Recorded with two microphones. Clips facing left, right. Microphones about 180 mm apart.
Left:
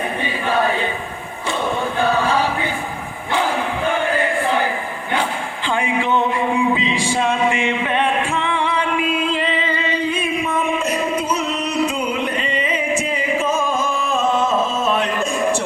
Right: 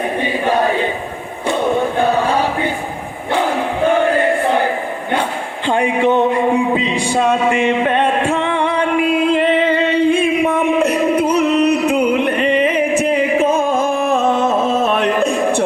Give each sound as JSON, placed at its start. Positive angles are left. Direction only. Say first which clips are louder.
{"t": 2.0, "sound": "chant", "louder": "right 3 dB", "side_deg": -50}
{"t": 4.0, "sound": "music", "louder": "right 5 dB", "side_deg": -50}
{"t": 5.6, "sound": "a sound", "louder": "right 6 dB", "side_deg": -45}
{"t": 10.4, "sound": "music", "louder": "right 6 dB", "side_deg": -65}